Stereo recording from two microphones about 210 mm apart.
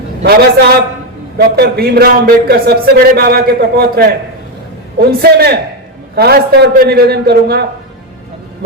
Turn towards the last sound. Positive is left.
turn(degrees=-50)  # may be behind; listen again after turning